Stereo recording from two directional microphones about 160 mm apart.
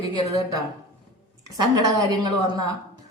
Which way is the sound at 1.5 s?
25° right (ahead or behind).